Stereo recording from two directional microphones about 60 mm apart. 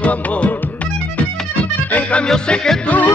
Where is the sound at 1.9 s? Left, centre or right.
Centre.